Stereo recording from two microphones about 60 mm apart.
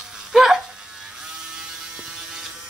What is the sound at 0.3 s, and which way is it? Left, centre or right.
Music, centre.